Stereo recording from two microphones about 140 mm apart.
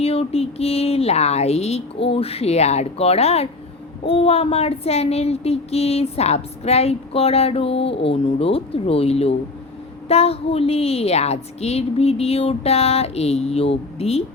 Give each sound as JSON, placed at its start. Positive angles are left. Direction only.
{"t": 0.0, "sound": "child singing", "side_deg": 45}